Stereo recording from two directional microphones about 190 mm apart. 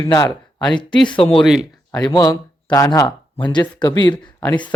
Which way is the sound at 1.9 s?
20° left (ahead or behind).